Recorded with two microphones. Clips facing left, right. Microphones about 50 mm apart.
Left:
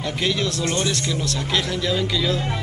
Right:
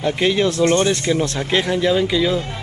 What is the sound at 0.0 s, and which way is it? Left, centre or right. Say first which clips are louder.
Speech: right 6 dB; right.